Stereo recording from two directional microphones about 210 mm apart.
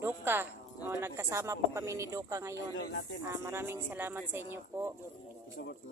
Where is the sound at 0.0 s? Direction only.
10° right (ahead or behind).